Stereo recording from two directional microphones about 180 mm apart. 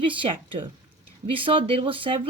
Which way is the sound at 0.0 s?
30° right (ahead or behind).